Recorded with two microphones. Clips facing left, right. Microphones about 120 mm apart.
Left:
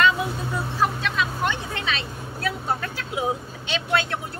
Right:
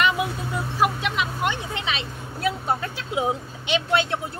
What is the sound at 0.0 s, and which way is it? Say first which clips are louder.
Vehicle: left 1 dB; 15° right (ahead or behind).